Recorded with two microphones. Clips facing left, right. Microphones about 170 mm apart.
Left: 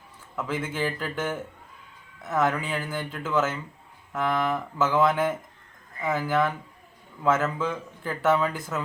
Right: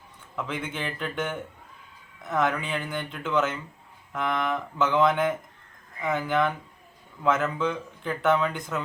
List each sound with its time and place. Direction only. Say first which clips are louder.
0.3 s speech: left 3 dB; 5° left (ahead or behind)